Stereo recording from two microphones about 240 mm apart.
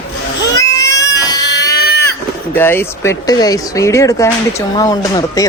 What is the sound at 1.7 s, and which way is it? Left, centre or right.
Sheep, left.